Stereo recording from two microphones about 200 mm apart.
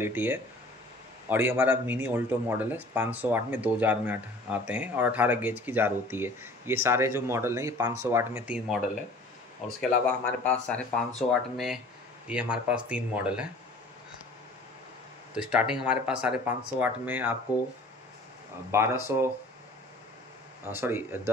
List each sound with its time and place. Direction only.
0.0 s speech: 10° right (ahead or behind)
15.3 s speech: 5° right (ahead or behind)
18.7 s speech: 15° right (ahead or behind)
20.6 s speech: 10° right (ahead or behind)